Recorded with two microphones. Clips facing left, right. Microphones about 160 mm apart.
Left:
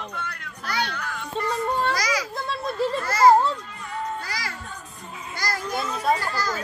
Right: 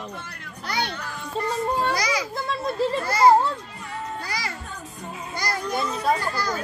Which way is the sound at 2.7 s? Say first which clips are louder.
Right 1 dB; 30° right (ahead or behind).